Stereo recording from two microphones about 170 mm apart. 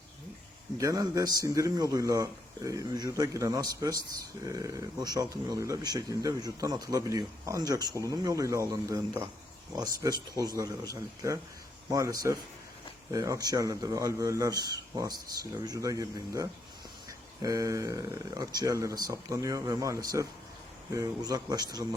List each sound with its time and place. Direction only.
0.8 s speech: 20° right (ahead or behind)